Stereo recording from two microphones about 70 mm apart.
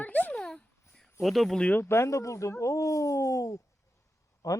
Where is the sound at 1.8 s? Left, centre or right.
Left.